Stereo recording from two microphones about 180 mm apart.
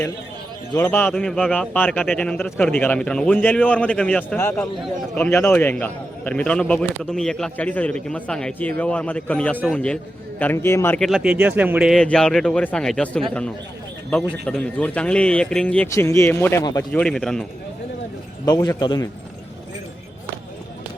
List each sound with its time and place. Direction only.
0.8 s a man's voice: 10° left (ahead or behind)
14.4 s a man's voice: 5° left (ahead or behind)
17.0 s a man's voice: 5° left (ahead or behind)
18.4 s a man's voice: 20° left (ahead or behind)